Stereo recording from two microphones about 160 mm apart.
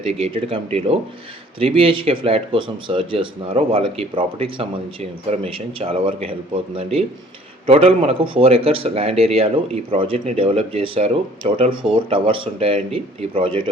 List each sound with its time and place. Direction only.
0.1 s speech: 35° right (ahead or behind)